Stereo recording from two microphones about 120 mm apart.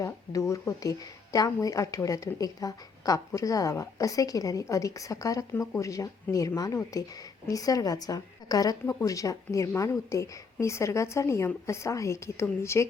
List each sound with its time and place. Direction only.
0.0 s a woman's voice: 25° left (ahead or behind)